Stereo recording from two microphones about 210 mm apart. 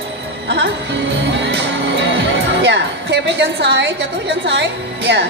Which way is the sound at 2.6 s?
55° right (ahead or behind).